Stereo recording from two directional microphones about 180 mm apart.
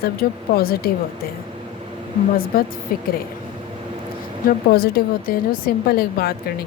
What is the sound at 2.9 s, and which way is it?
Speech, 50° left (ahead or behind).